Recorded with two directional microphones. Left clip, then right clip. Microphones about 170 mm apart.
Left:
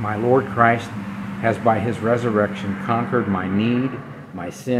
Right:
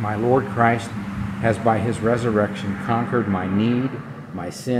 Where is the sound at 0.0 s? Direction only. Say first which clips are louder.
Left 1 dB; 10° left (ahead or behind).